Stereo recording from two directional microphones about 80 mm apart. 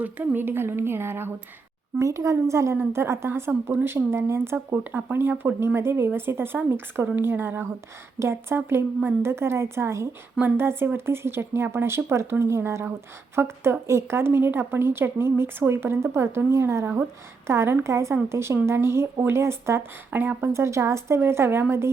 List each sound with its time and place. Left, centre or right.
0.0 s a woman's voice: right